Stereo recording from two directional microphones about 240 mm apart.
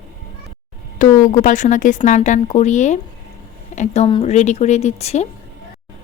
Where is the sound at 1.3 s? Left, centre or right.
Left.